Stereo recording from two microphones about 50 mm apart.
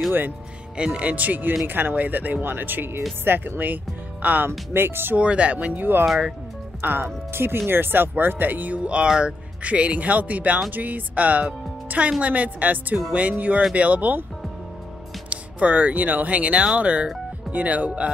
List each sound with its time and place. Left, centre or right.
0.7 s speech: right
4.5 s speech: right
5.1 s speech: right
8.8 s speech: centre
15.2 s speech: right